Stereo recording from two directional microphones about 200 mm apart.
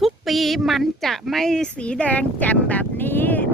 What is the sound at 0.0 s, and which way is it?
Speech, centre (ahead or behind).